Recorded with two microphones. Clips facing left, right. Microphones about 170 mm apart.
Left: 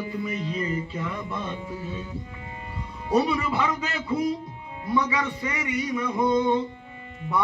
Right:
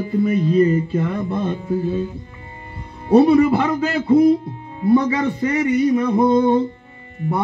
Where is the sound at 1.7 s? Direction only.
50° right (ahead or behind).